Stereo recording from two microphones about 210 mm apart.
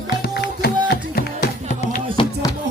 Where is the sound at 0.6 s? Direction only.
50° left (ahead or behind).